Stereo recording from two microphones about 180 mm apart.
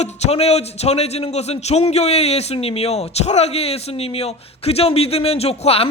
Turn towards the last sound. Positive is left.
turn(degrees=35)  # may be behind; listen again after turning